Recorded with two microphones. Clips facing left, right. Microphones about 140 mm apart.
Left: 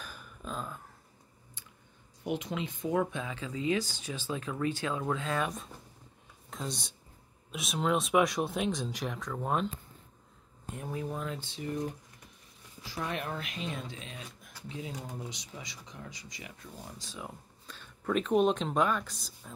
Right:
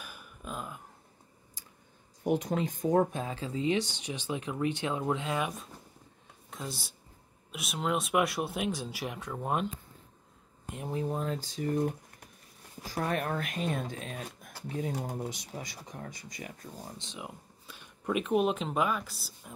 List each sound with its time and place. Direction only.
0.0 s a sound: 10° right (ahead or behind)
2.2 s speech: 45° right (ahead or behind); by 5.5 s 20° right (ahead or behind)
6.5 s speech: 5° right (ahead or behind)
10.7 s speech: 25° right (ahead or behind); by 16.7 s 45° right (ahead or behind)
17.0 s speech: 20° right (ahead or behind)